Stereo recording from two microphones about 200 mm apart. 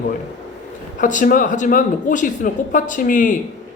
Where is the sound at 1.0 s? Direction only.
40° left (ahead or behind).